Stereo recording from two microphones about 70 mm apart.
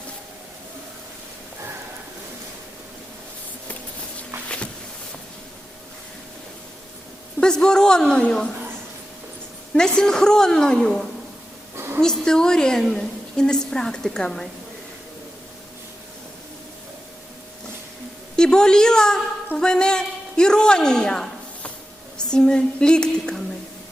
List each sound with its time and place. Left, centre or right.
4.4 s a sound: centre
7.3 s a woman's voice: centre
9.7 s a woman's voice: centre
18.3 s a woman's voice: centre
22.3 s a woman's voice: centre